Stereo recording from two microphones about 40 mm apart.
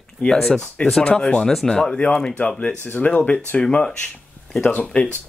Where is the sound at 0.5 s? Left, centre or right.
Centre.